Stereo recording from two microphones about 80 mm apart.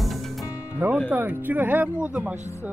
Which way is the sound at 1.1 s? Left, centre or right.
Right.